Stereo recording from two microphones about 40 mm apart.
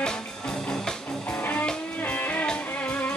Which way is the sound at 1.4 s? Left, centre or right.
Left.